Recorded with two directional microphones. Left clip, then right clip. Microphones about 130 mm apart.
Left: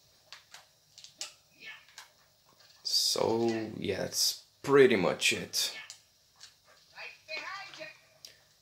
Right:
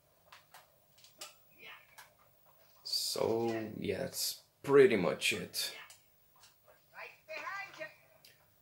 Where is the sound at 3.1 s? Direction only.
40° left (ahead or behind).